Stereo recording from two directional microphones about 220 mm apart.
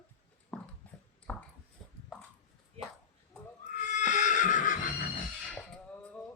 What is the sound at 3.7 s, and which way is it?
Neigh, 35° left (ahead or behind).